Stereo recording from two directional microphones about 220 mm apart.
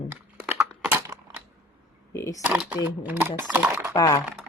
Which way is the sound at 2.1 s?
15° left (ahead or behind).